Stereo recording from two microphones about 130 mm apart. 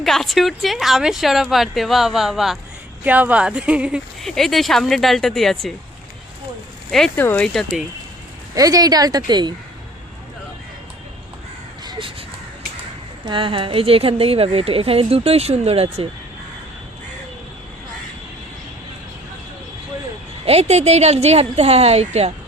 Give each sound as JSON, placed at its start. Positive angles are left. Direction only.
{"t": 0.0, "sound": "speech", "side_deg": 0}
{"t": 4.2, "sound": "speech", "side_deg": 0}
{"t": 7.2, "sound": "speech", "side_deg": 15}
{"t": 7.4, "sound": "speech", "side_deg": 5}
{"t": 8.5, "sound": "speech", "side_deg": -30}
{"t": 11.9, "sound": "a sound", "side_deg": -40}
{"t": 13.2, "sound": "a woman's voice", "side_deg": -40}
{"t": 20.4, "sound": "a woman's voice", "side_deg": -55}